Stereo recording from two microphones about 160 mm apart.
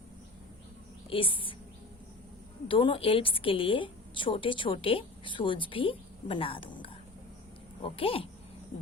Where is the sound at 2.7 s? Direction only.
35° left (ahead or behind).